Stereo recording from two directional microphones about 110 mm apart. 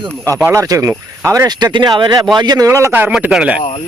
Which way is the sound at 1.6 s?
40° right (ahead or behind).